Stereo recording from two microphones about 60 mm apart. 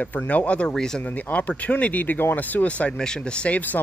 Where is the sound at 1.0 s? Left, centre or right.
Left.